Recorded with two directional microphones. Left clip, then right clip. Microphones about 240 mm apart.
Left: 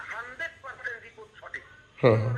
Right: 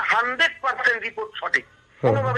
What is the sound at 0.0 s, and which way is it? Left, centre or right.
A man's voice, right.